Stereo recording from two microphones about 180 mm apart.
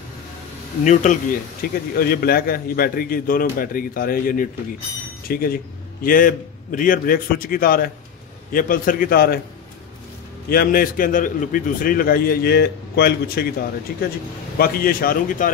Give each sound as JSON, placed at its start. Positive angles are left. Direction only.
{"t": 1.1, "sound": "a man's voice", "side_deg": 40}
{"t": 1.6, "sound": "a man's voice", "side_deg": 60}
{"t": 10.5, "sound": "a man's voice", "side_deg": 55}